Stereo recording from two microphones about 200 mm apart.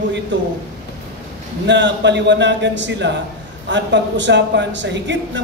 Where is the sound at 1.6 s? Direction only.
65° right (ahead or behind).